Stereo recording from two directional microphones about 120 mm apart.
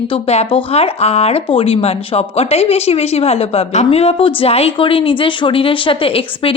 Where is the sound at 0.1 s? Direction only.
55° left (ahead or behind).